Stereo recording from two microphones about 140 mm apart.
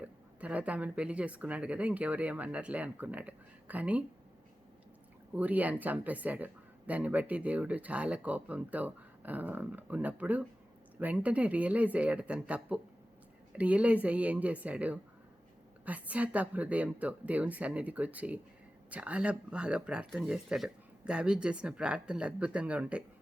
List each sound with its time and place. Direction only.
0.0 s speech: 10° right (ahead or behind)
5.3 s speech: 10° right (ahead or behind)